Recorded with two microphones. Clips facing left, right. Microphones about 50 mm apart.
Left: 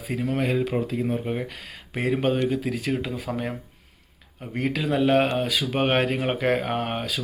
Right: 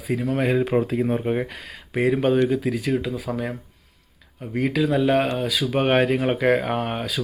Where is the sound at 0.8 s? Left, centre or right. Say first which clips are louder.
Right 4 dB; right.